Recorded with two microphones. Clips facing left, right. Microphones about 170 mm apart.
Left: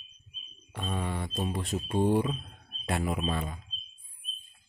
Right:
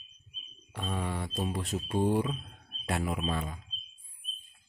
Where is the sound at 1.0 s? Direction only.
Centre (ahead or behind).